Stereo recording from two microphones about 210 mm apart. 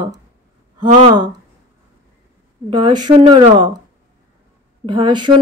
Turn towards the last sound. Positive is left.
turn(degrees=-20)  # may be behind; listen again after turning